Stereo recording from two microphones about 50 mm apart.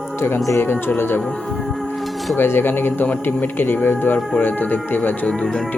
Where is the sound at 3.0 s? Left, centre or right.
Left.